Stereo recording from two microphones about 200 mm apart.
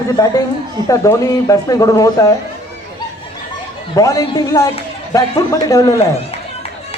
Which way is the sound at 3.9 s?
15° left (ahead or behind).